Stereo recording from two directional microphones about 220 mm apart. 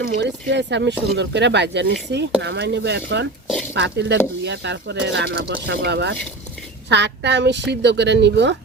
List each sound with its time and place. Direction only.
0.0 s speech: 50° right (ahead or behind)